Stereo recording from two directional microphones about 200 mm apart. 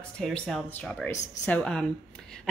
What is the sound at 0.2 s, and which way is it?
Speech, centre (ahead or behind).